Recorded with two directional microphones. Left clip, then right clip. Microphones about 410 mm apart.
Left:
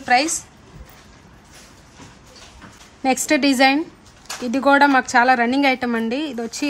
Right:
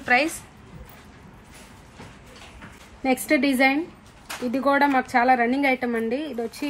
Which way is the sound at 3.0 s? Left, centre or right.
Left.